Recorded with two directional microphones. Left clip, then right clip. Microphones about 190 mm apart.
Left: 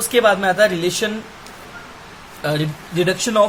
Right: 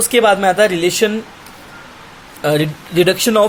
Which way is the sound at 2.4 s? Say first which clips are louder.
Right 6 dB; 35° right (ahead or behind).